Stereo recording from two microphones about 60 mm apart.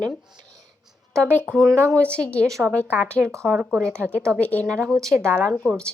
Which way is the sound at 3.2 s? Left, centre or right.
Right.